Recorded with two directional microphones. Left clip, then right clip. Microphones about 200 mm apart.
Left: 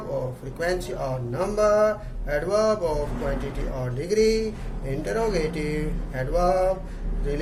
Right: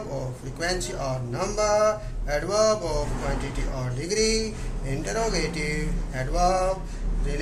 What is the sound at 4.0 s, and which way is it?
Speech, 55° left (ahead or behind).